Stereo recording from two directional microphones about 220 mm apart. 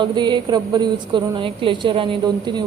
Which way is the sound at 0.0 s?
20° right (ahead or behind).